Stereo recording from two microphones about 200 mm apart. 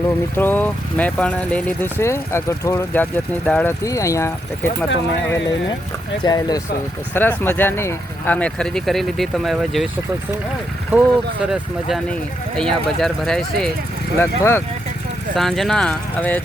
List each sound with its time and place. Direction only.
0.3 s speech: 10° left (ahead or behind)
10.9 s speech: 10° right (ahead or behind)
12.5 s speech: 5° left (ahead or behind)
15.4 s speech: centre (ahead or behind)